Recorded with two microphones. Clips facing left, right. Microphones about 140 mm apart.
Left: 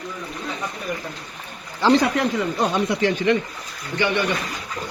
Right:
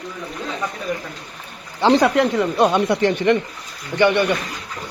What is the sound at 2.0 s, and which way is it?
Speech, 65° right (ahead or behind).